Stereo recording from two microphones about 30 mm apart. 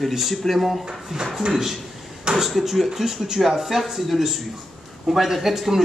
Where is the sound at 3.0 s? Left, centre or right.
Centre.